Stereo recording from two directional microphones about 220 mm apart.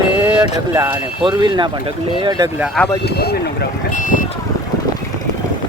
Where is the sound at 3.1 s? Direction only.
45° left (ahead or behind).